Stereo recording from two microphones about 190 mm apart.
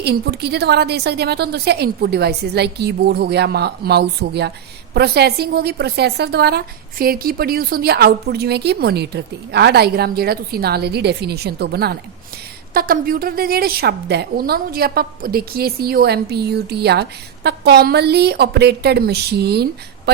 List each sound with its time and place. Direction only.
0.0 s a woman's voice: 60° right (ahead or behind)